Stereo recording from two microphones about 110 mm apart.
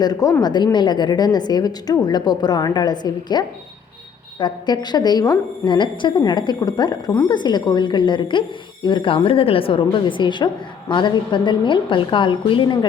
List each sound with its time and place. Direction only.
0.0 s a woman's voice: 35° left (ahead or behind)